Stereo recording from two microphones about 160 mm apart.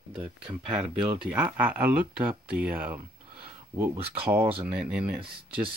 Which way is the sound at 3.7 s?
15° right (ahead or behind).